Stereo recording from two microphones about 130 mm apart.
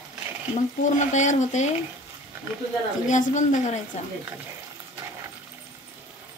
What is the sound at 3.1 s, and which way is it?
Speech, 70° left (ahead or behind).